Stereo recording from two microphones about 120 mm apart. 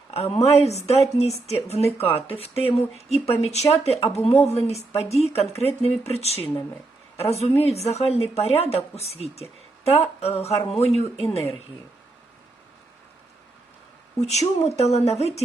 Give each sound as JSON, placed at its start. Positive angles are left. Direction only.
{"t": 0.1, "sound": "speech", "side_deg": 60}
{"t": 14.2, "sound": "speech", "side_deg": 65}